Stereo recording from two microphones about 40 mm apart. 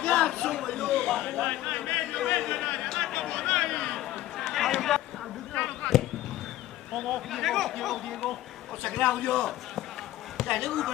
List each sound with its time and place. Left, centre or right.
0.0 s chatter: centre
0.3 s chatter: centre
1.9 s a man's voice: centre
2.6 s a sound: left
2.9 s chatter: centre
3.9 s a sound: centre
5.5 s a sound: left
6.9 s a man's voice: centre
8.8 s a man's voice: left